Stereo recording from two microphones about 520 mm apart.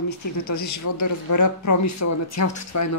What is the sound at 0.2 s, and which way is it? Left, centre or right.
A woman's voice, left.